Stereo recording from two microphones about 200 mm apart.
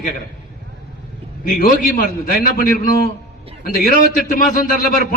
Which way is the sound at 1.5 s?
45° left (ahead or behind).